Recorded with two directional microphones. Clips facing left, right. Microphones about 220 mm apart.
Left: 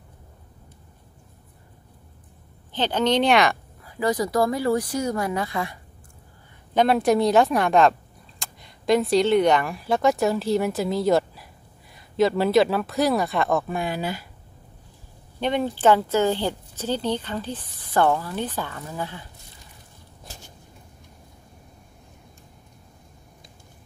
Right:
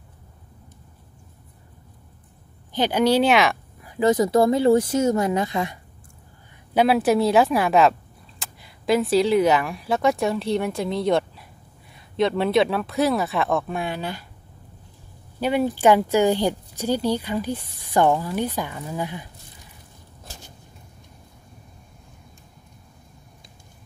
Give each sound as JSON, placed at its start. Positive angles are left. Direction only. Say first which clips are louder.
{"t": 2.7, "sound": "speech", "louder": "right 3 dB", "side_deg": -10}
{"t": 3.8, "sound": "speech", "louder": "right 5 dB", "side_deg": -20}
{"t": 6.7, "sound": "speech", "louder": "right 1 dB", "side_deg": -5}
{"t": 15.4, "sound": "speech", "louder": "right 2 dB", "side_deg": -10}